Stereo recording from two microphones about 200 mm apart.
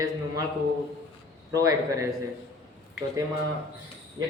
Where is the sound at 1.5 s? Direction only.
15° right (ahead or behind).